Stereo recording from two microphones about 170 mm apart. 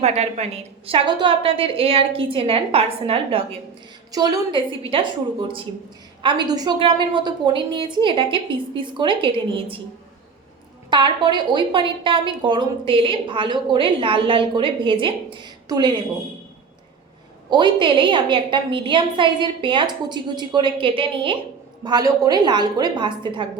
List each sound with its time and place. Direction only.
0.0 s a woman's voice: 40° right (ahead or behind)
4.1 s a woman's voice: 25° right (ahead or behind)
6.2 s a woman's voice: 25° right (ahead or behind)
10.8 s a woman's voice: 25° right (ahead or behind)
17.5 s a woman's voice: 30° right (ahead or behind)